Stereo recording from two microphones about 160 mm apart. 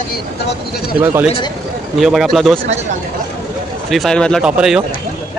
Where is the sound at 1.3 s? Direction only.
30° left (ahead or behind).